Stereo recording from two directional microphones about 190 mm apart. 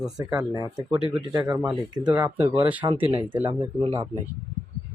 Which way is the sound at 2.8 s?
25° right (ahead or behind).